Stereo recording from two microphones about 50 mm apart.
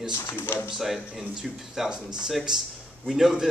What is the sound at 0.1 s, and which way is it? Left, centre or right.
Speech, left.